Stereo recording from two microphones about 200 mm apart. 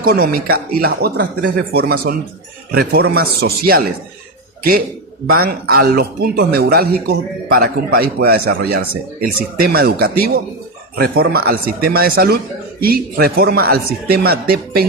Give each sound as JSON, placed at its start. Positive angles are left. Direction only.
{"t": 0.0, "sound": "a man's voice", "side_deg": -45}
{"t": 5.2, "sound": "a man's voice", "side_deg": -50}